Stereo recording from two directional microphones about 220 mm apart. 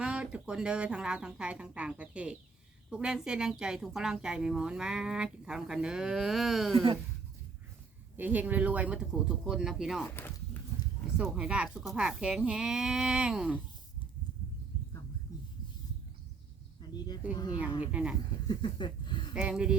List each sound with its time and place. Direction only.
0.0 s speech: 5° right (ahead or behind)
8.1 s speech: 10° right (ahead or behind)
11.2 s speech: 5° right (ahead or behind)
17.6 s speech: 5° right (ahead or behind)
18.4 s a sound: 20° left (ahead or behind)
19.3 s speech: 5° right (ahead or behind)